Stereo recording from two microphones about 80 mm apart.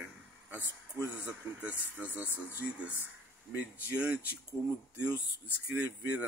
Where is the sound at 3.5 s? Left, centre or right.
Centre.